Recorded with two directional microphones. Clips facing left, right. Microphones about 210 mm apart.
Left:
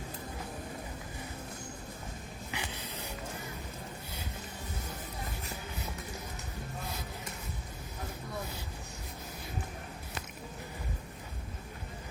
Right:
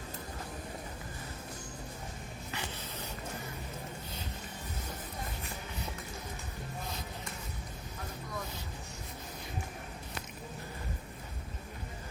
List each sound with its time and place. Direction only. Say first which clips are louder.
2.5 s spray: left 1 dB; 15° left (ahead or behind)